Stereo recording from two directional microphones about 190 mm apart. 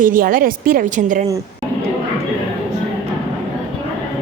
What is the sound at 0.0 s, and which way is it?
A woman's voice, 45° right (ahead or behind).